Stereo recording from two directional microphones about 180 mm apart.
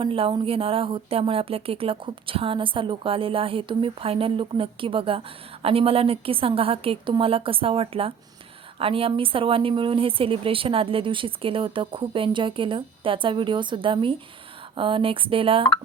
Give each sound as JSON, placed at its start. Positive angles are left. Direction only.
{"t": 0.0, "sound": "a woman's voice", "side_deg": -30}